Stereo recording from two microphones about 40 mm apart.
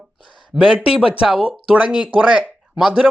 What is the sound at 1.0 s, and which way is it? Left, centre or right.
Speech, centre.